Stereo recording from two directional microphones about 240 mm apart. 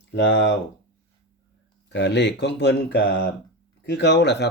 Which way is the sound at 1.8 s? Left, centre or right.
Left.